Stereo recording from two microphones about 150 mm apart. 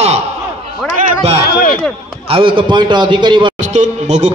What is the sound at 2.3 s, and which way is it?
A man's voice, 35° right (ahead or behind).